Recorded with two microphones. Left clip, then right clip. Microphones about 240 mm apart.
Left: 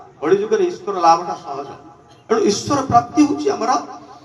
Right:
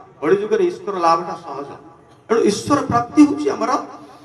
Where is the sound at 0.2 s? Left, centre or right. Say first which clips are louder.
Even; right.